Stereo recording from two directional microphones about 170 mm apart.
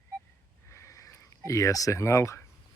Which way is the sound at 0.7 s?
20° left (ahead or behind).